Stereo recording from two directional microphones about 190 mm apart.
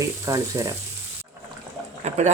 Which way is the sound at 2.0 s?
35° right (ahead or behind).